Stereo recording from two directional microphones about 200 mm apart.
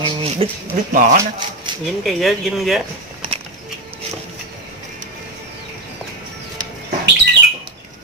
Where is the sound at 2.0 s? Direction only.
Centre (ahead or behind).